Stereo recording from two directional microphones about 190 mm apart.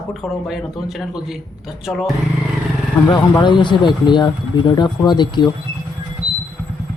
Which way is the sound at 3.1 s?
25° left (ahead or behind).